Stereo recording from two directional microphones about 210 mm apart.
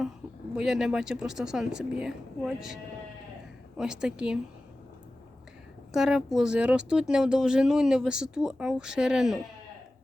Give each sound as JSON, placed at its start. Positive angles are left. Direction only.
{"t": 0.5, "sound": "speech", "side_deg": 0}
{"t": 3.8, "sound": "speech", "side_deg": -5}
{"t": 5.9, "sound": "speech", "side_deg": 0}